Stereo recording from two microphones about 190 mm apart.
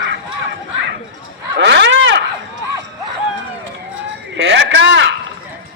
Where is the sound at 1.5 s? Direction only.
65° right (ahead or behind).